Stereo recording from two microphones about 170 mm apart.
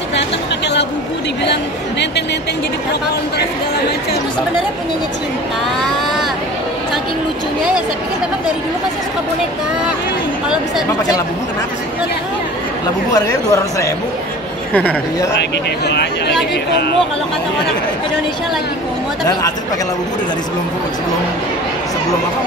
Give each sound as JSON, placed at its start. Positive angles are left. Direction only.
{"t": 1.4, "sound": "a woman's voice", "side_deg": 90}
{"t": 13.1, "sound": "speech", "side_deg": 20}
{"t": 14.7, "sound": "speech", "side_deg": 10}
{"t": 15.9, "sound": "a woman's voice", "side_deg": 80}